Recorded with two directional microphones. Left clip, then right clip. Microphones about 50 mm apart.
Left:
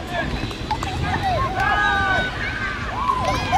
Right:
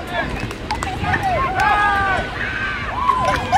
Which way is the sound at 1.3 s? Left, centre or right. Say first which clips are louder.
Right 4 dB; right.